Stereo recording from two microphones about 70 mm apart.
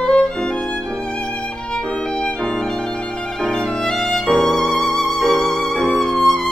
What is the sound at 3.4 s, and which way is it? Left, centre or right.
Music, centre.